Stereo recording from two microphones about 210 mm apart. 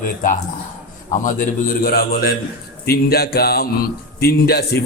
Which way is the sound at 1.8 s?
45° left (ahead or behind).